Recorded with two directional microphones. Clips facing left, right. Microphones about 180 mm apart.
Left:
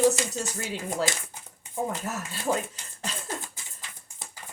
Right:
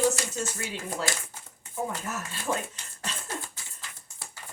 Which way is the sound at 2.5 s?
30° left (ahead or behind).